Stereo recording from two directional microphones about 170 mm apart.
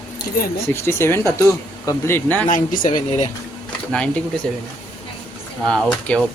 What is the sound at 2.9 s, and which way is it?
Speech, 45° left (ahead or behind).